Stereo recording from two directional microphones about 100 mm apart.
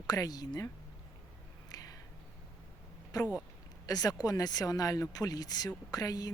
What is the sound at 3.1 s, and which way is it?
Speech, 40° left (ahead or behind).